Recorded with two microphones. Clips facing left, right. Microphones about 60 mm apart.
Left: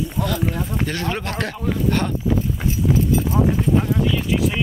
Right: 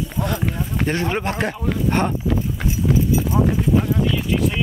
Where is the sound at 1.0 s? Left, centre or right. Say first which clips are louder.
Right 3 dB; centre.